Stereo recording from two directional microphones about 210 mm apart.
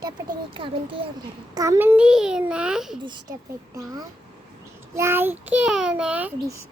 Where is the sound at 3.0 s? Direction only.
20° right (ahead or behind).